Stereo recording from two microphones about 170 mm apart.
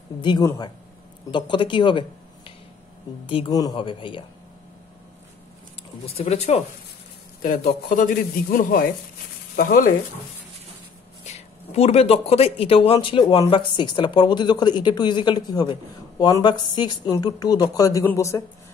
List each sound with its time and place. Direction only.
0.2 s speech: 25° left (ahead or behind)
6.0 s speech: 35° left (ahead or behind)
7.4 s speech: 50° left (ahead or behind)
11.2 s speech: 40° left (ahead or behind); by 18.4 s 15° left (ahead or behind)